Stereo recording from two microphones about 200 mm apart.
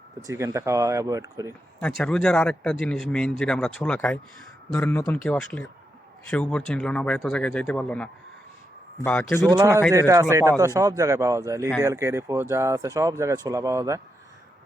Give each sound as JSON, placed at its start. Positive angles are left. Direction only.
{"t": 0.3, "sound": "speech", "side_deg": -15}
{"t": 2.0, "sound": "speech", "side_deg": 5}
{"t": 9.9, "sound": "speech", "side_deg": -15}